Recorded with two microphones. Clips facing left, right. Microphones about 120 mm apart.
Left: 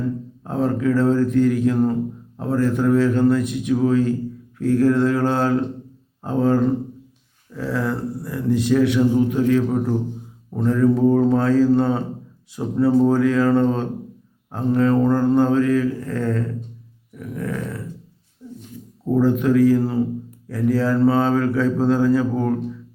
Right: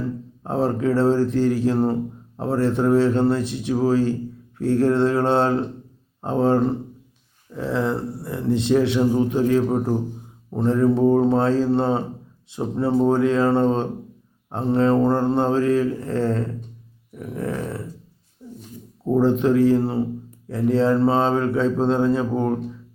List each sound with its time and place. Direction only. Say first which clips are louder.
0.4 s speech: left 1 dB; 30° right (ahead or behind)
17.2 s a sound: even; 30° right (ahead or behind)
19.1 s speech: left 1 dB; 25° right (ahead or behind)